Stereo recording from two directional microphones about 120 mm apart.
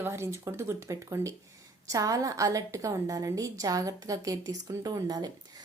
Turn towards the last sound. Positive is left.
turn(degrees=-35)  # may be behind; listen again after turning